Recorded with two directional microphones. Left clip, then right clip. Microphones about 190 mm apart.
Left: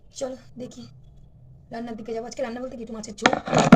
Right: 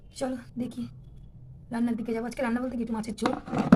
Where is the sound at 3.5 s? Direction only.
80° left.